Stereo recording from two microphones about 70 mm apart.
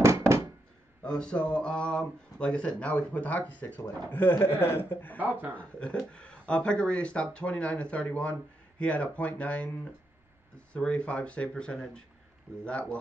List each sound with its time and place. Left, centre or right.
0.0 s a sound: right
1.0 s a man's voice: centre; by 5.2 s left
5.2 s speech: right
5.5 s speech: centre
10.7 s speech: centre